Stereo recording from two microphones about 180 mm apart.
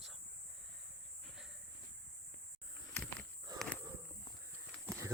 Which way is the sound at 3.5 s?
20° right (ahead or behind).